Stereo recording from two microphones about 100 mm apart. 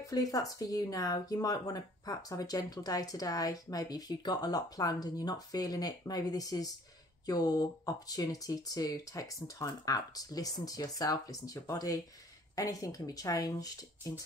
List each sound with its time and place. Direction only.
0.0 s speech: 35° left (ahead or behind)